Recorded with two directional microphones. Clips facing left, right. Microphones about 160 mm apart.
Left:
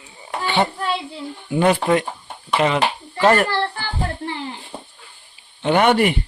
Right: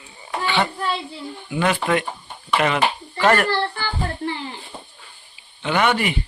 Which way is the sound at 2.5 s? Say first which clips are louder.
Left 1 dB; 25° left (ahead or behind).